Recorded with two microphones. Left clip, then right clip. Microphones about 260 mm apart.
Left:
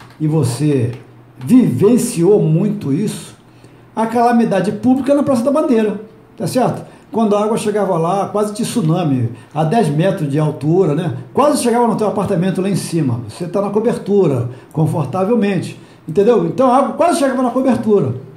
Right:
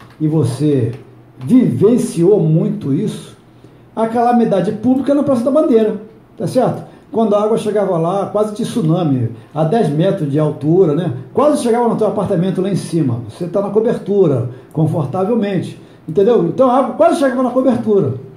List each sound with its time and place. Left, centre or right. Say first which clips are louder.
0.3 s a man's voice: right 1 dB; left